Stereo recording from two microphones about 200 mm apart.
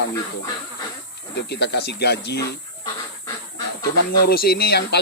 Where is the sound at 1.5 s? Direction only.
55° left (ahead or behind).